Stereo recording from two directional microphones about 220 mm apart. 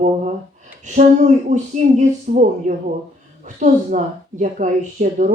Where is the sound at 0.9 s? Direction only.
35° right (ahead or behind).